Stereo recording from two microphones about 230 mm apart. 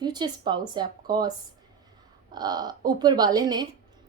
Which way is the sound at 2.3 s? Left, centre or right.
Centre.